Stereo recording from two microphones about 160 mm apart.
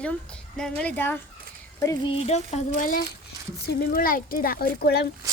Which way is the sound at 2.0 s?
40° left (ahead or behind).